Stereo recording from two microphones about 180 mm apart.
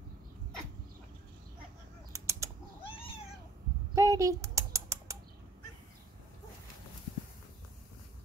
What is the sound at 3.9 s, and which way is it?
Rodents, 15° right (ahead or behind).